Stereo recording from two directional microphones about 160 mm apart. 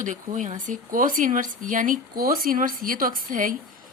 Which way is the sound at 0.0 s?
50° right (ahead or behind).